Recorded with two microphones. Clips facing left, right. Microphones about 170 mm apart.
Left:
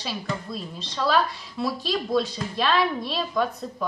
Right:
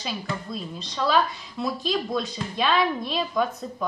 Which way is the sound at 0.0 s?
Centre (ahead or behind).